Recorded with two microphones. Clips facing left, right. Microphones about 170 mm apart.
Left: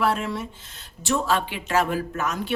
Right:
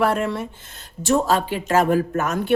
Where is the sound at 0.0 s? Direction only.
55° right (ahead or behind).